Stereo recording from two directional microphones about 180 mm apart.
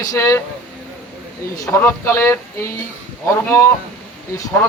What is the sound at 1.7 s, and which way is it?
Speech, 10° left (ahead or behind).